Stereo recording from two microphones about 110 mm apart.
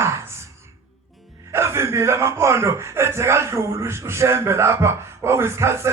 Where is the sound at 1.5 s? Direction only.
25° right (ahead or behind).